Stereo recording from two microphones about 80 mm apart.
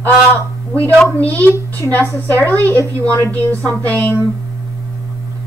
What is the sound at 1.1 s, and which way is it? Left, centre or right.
Speech, left.